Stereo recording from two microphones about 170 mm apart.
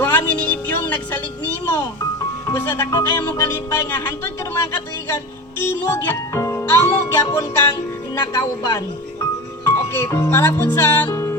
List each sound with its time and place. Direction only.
0.0 s music: 10° left (ahead or behind)
2.5 s speech: 15° left (ahead or behind)